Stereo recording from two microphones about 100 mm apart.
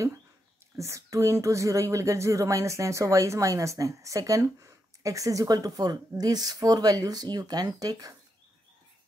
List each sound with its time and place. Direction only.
0.7 s speech: 30° right (ahead or behind)